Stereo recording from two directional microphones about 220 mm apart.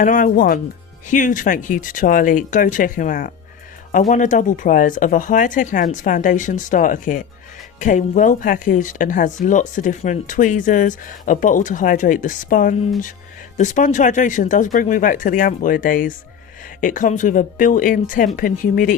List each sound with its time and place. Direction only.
0.0 s speech: 35° left (ahead or behind)